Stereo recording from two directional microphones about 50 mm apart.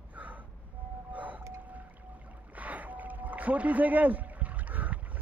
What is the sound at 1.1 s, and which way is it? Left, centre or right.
Vehicle, right.